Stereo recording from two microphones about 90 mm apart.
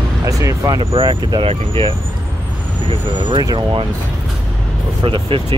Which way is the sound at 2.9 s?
60° right (ahead or behind).